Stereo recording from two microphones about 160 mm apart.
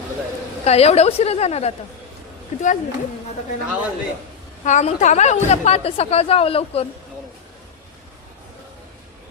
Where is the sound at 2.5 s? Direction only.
50° left (ahead or behind).